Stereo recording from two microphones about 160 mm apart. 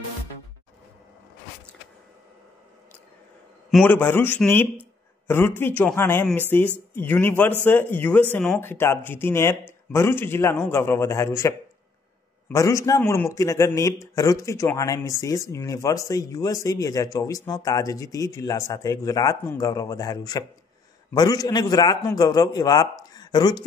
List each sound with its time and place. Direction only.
3.8 s speech: 10° left (ahead or behind)
12.5 s speech: 20° left (ahead or behind)